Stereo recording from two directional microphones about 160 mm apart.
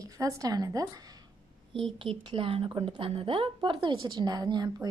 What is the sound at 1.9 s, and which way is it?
A woman's voice, 30° right (ahead or behind).